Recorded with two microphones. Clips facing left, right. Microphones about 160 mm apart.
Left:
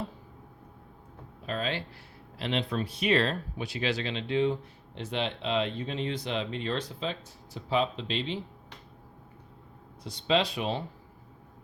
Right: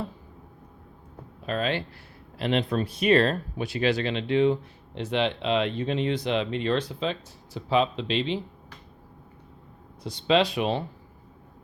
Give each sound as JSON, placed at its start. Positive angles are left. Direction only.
{"t": 1.5, "sound": "speech", "side_deg": -70}
{"t": 2.4, "sound": "speech", "side_deg": -50}
{"t": 4.9, "sound": "speech", "side_deg": -85}
{"t": 10.0, "sound": "speech", "side_deg": -75}